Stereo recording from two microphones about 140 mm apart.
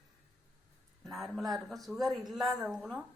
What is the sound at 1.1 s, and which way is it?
Speech, centre (ahead or behind).